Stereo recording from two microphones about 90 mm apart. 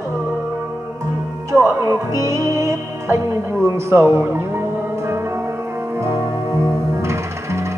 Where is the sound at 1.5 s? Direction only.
30° right (ahead or behind).